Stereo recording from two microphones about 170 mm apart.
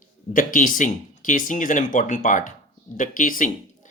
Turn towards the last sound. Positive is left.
turn(degrees=50)  # may be behind; listen again after turning